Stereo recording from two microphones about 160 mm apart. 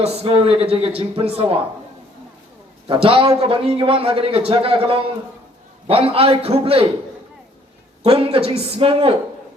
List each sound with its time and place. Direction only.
0.0 s a man's voice: 40° right (ahead or behind)
2.8 s a man's voice: 35° right (ahead or behind)
8.0 s a man's voice: 35° right (ahead or behind)